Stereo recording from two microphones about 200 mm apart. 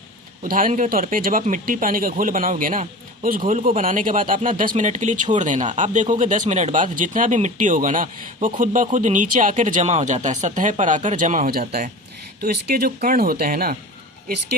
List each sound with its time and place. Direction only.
0.4 s speech: 45° right (ahead or behind)